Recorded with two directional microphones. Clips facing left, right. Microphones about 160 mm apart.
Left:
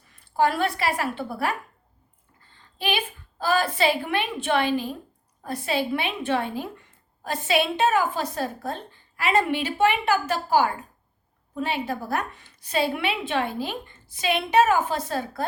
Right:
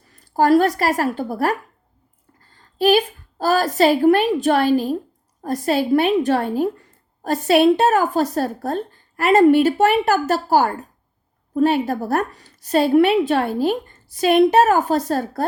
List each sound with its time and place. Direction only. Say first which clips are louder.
0.1 s a woman's voice: right 8 dB; 40° right (ahead or behind)